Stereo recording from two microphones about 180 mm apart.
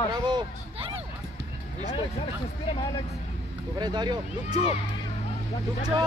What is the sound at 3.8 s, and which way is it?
Speech, 25° right (ahead or behind).